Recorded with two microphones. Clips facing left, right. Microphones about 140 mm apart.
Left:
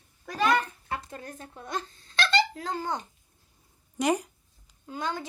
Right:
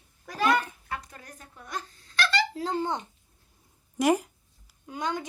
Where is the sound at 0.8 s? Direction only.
25° left (ahead or behind).